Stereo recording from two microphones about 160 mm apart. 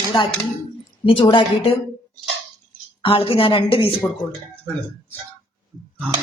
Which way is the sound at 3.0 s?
35° left (ahead or behind).